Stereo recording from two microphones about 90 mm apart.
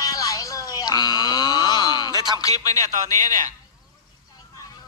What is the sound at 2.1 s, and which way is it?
Music, 50° right (ahead or behind).